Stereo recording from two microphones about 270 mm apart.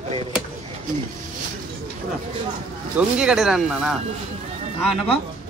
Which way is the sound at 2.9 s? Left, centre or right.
Centre.